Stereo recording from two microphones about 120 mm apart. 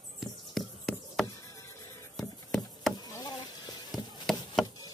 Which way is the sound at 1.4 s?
25° left (ahead or behind).